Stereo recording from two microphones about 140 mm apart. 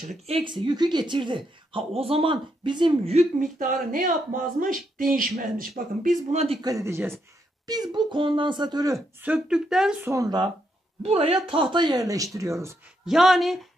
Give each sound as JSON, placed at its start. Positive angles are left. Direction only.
{"t": 0.3, "sound": "a woman's voice", "side_deg": -35}
{"t": 3.2, "sound": "speech", "side_deg": -70}
{"t": 6.3, "sound": "a man's voice", "side_deg": -45}
{"t": 6.6, "sound": "speech", "side_deg": -25}
{"t": 7.6, "sound": "a woman's voice", "side_deg": -30}
{"t": 9.2, "sound": "speech", "side_deg": -5}
{"t": 10.0, "sound": "speech", "side_deg": -25}
{"t": 11.0, "sound": "a man's voice", "side_deg": -45}
{"t": 11.4, "sound": "speech", "side_deg": -35}
{"t": 13.0, "sound": "speech", "side_deg": -5}